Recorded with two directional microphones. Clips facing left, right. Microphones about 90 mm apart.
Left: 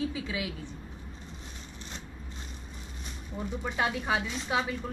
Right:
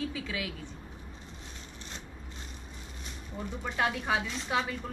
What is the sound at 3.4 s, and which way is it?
A woman's voice, 15° left (ahead or behind).